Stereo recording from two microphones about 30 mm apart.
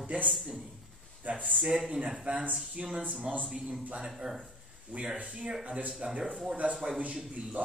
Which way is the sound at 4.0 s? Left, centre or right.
Centre.